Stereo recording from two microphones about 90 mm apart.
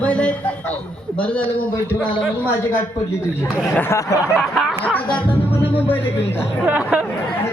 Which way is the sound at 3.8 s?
35° left (ahead or behind).